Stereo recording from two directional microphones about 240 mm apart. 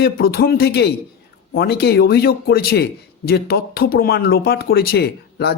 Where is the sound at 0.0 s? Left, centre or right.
Left.